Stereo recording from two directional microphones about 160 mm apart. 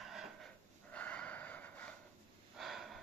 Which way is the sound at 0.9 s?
10° left (ahead or behind).